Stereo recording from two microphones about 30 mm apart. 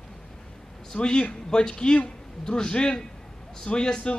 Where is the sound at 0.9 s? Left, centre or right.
Left.